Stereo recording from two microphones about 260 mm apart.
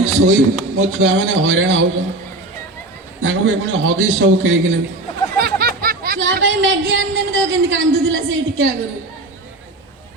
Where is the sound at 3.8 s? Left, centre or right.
Right.